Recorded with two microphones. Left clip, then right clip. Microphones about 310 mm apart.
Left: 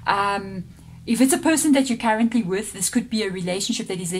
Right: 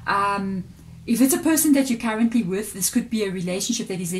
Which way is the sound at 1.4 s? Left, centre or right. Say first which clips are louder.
Left 1 dB; left.